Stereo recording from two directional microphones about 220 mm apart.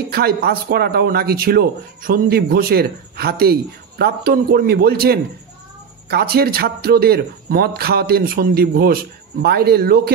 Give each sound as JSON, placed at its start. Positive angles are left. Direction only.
{"t": 0.1, "sound": "a man's voice", "side_deg": -45}